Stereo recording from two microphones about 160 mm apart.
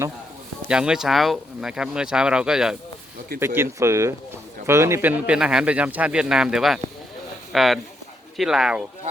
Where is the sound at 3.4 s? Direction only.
15° right (ahead or behind).